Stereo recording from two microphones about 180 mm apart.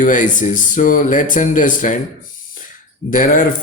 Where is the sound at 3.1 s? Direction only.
50° left (ahead or behind).